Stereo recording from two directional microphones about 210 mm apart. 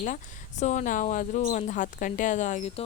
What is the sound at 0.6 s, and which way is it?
Speech, 35° left (ahead or behind).